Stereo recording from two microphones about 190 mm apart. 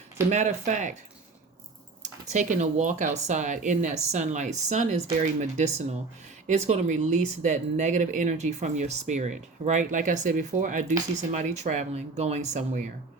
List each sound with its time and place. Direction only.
0.3 s speech: 40° right (ahead or behind)
2.0 s speech: 40° right (ahead or behind)